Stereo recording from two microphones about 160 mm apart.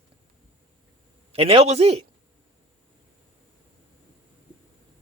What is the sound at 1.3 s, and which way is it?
Speech, 35° right (ahead or behind).